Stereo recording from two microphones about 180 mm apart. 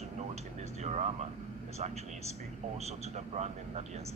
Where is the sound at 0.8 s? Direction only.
40° right (ahead or behind).